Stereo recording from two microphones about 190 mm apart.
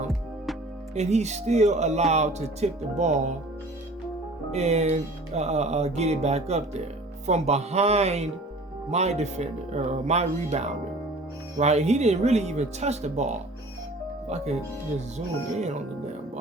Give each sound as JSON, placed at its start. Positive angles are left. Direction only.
{"t": 0.9, "sound": "speech", "side_deg": -35}
{"t": 4.5, "sound": "speech", "side_deg": -35}